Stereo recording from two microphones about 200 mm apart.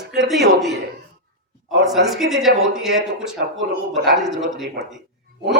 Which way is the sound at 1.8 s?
Centre (ahead or behind).